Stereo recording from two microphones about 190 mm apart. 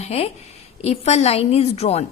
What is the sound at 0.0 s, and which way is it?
A woman's voice, 35° left (ahead or behind).